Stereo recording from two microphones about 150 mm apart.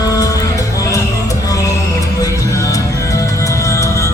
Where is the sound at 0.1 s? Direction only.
25° left (ahead or behind).